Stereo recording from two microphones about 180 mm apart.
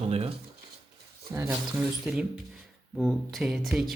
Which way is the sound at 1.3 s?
10° right (ahead or behind).